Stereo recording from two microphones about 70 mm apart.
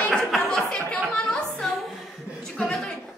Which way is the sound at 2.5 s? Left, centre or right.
Centre.